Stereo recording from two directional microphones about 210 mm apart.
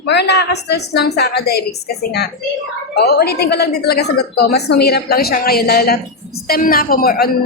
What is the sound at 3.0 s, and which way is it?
A woman's voice, 50° left (ahead or behind).